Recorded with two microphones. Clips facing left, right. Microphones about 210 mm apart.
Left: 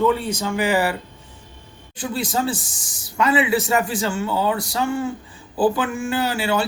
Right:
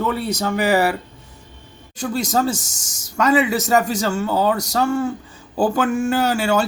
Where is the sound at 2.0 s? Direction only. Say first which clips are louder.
Right 3 dB; 45° right (ahead or behind).